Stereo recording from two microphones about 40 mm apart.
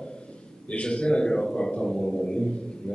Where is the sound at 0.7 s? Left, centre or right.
Left.